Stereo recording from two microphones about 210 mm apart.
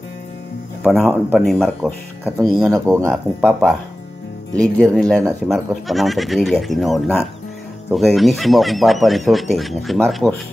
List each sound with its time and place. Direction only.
0.9 s speech: 5° left (ahead or behind)
2.7 s speech: 15° right (ahead or behind)
3.1 s speech: centre (ahead or behind)
4.7 s speech: 5° left (ahead or behind)